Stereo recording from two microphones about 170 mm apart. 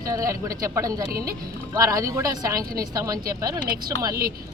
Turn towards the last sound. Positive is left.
turn(degrees=-20)  # may be behind; listen again after turning